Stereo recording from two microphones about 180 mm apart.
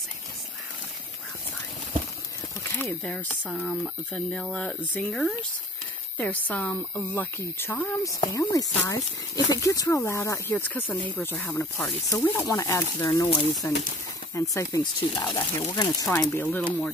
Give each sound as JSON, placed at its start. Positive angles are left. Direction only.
{"t": 2.8, "sound": "speech", "side_deg": 5}